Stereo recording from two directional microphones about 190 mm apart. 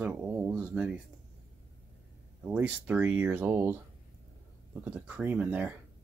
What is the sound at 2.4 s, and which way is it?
Speech, 5° right (ahead or behind).